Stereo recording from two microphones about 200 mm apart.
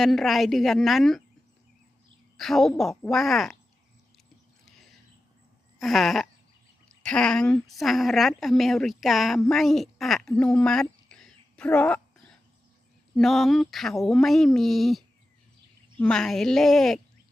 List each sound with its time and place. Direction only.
0.0 s speech: centre (ahead or behind)
2.4 s speech: centre (ahead or behind)
4.6 s a sound: centre (ahead or behind)
5.8 s a woman's voice: centre (ahead or behind)
13.1 s speech: centre (ahead or behind)